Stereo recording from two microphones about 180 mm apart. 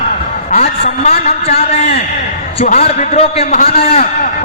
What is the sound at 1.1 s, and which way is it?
A man's voice, 35° left (ahead or behind).